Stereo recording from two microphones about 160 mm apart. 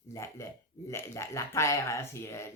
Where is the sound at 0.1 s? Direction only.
20° left (ahead or behind).